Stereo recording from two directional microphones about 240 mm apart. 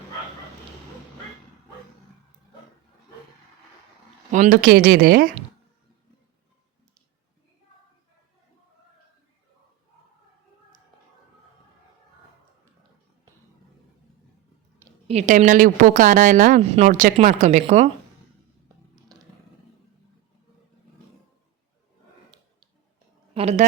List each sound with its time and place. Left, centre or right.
4.3 s a woman's voice: right
15.0 s a woman's voice: right
23.3 s a woman's voice: right